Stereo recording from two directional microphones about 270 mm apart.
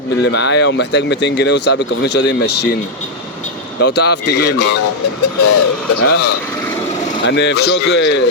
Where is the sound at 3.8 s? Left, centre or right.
Left.